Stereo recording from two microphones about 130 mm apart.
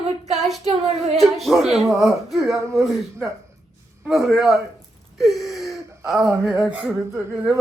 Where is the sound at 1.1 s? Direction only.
Centre (ahead or behind).